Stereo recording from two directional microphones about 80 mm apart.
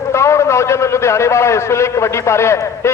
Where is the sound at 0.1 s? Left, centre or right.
Left.